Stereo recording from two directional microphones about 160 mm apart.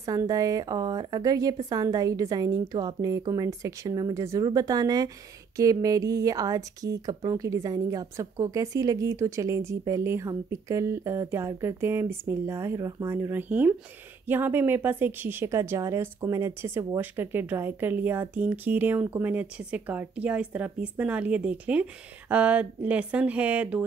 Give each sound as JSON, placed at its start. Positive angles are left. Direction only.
{"t": 0.0, "sound": "speech", "side_deg": -20}